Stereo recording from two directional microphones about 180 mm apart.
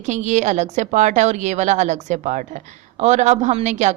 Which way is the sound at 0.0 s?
40° right (ahead or behind).